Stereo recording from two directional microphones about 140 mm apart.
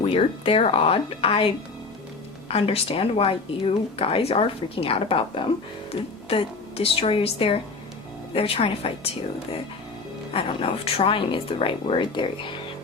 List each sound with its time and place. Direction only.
0.0 s speech: 40° left (ahead or behind)
2.5 s speech: 45° left (ahead or behind)
10.3 s speech: 45° left (ahead or behind)